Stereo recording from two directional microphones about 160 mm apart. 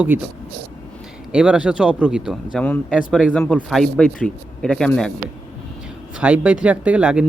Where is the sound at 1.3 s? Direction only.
5° right (ahead or behind).